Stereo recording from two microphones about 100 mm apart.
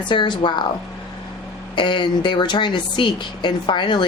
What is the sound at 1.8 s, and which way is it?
A woman's voice, 55° left (ahead or behind).